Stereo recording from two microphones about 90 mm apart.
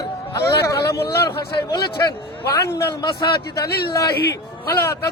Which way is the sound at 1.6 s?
45° left (ahead or behind).